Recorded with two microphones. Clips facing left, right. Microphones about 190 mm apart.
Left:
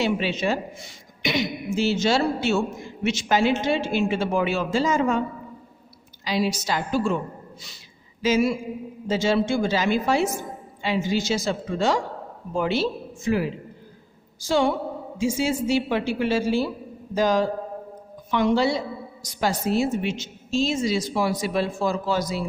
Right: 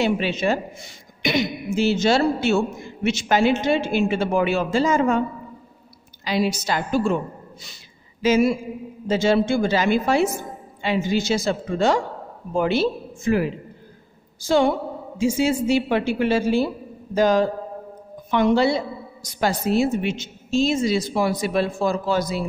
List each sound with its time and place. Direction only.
0.0 s a man's voice: 55° right (ahead or behind)
6.2 s a man's voice: 55° right (ahead or behind)
7.6 s a sound: 55° right (ahead or behind)
9.0 s a man's voice: 55° right (ahead or behind)